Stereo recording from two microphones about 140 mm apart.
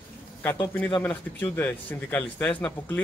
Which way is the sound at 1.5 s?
15° left (ahead or behind).